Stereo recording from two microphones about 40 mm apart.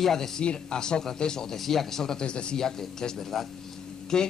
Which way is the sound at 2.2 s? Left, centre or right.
Left.